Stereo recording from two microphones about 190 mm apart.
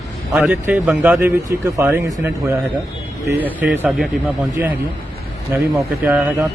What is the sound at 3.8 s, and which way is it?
Speech, centre (ahead or behind).